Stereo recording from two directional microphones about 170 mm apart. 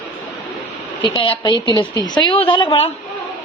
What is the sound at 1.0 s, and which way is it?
A woman's voice, 30° left (ahead or behind).